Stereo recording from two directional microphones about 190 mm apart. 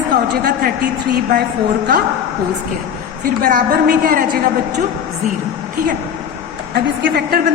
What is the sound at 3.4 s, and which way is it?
Speech, 50° right (ahead or behind).